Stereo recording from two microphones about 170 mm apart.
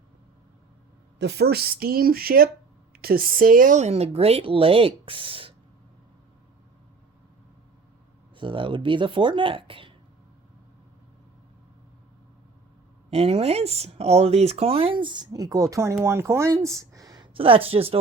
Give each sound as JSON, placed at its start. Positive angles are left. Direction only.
{"t": 1.2, "sound": "speech", "side_deg": -75}
{"t": 8.4, "sound": "speech", "side_deg": -30}
{"t": 13.1, "sound": "speech", "side_deg": -35}